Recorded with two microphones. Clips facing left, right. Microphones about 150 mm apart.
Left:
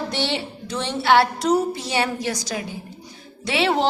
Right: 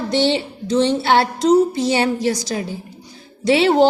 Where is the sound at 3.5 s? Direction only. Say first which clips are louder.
Right 7 dB; 35° right (ahead or behind).